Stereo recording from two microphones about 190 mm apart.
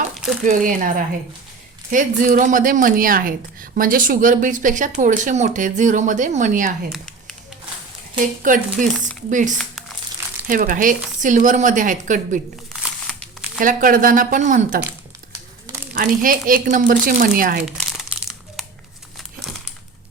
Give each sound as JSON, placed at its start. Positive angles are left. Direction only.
{"t": 0.4, "sound": "a woman's voice", "side_deg": -45}
{"t": 6.9, "sound": "a sound", "side_deg": 5}
{"t": 8.2, "sound": "a woman's voice", "side_deg": -45}
{"t": 13.6, "sound": "a woman's voice", "side_deg": -45}
{"t": 16.0, "sound": "a woman's voice", "side_deg": -45}
{"t": 17.9, "sound": "crumpling", "side_deg": 0}